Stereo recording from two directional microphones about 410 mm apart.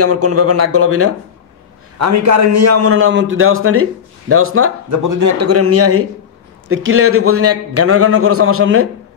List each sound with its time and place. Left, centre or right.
0.0 s a man's voice: right